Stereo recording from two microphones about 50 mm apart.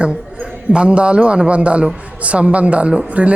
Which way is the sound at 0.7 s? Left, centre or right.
Right.